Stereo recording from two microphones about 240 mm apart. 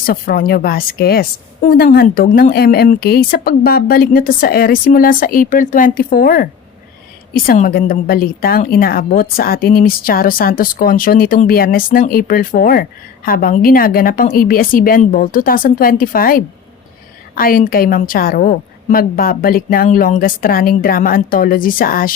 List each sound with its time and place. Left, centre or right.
0.0 s a woman's voice: left